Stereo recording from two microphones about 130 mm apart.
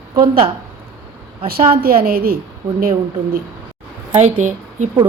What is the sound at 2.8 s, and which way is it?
Speech, 90° right.